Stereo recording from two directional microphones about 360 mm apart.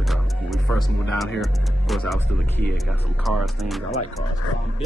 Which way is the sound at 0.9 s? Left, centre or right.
Centre.